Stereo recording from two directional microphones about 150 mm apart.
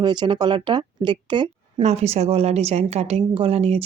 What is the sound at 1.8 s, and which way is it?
A woman's voice, 45° right (ahead or behind).